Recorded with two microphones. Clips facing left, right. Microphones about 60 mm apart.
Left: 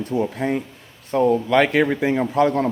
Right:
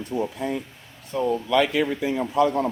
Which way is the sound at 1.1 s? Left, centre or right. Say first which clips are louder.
Left 5 dB; left.